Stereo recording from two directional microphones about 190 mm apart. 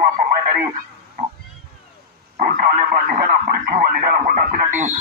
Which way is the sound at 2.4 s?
50° right (ahead or behind).